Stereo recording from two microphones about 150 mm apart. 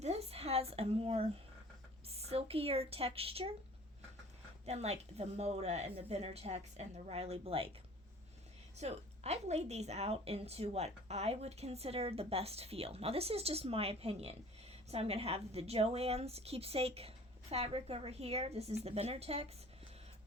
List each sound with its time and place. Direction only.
0.0 s a sound: 45° right (ahead or behind)
2.0 s speech: 40° right (ahead or behind)
4.6 s a woman's voice: 45° right (ahead or behind)
8.7 s a woman's voice: 45° right (ahead or behind)